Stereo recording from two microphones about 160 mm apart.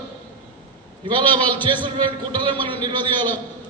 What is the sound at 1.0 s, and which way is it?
A man's voice, 30° right (ahead or behind).